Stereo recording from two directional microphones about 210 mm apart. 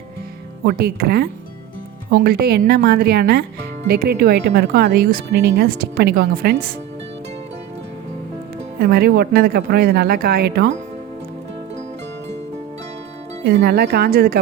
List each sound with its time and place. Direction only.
0.6 s speech: 50° right (ahead or behind)
8.8 s speech: 45° right (ahead or behind)
13.4 s speech: 50° right (ahead or behind)